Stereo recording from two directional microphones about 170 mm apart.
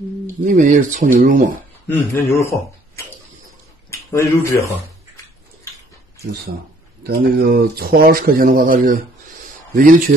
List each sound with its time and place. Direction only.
0.4 s speech: 45° right (ahead or behind)
1.9 s speech: 15° left (ahead or behind)
4.1 s speech: 15° left (ahead or behind)
7.0 s speech: 70° right (ahead or behind)